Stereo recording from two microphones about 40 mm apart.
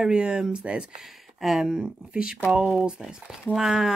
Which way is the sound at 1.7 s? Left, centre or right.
Right.